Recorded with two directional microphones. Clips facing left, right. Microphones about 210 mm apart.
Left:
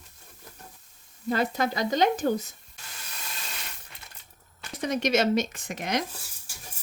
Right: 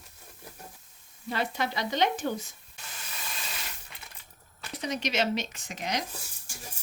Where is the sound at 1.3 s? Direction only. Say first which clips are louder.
Left 5 dB; 45° left (ahead or behind).